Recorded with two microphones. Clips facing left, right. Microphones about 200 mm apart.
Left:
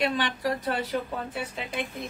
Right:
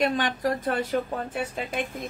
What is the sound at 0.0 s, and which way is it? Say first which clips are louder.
Speech: right 2 dB; 45° right (ahead or behind).